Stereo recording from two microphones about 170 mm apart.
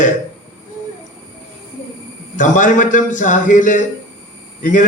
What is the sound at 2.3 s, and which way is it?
A man's voice, 50° left (ahead or behind).